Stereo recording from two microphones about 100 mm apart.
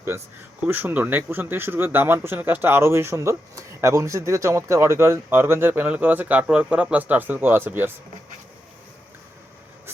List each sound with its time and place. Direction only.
0.6 s speech: 20° right (ahead or behind)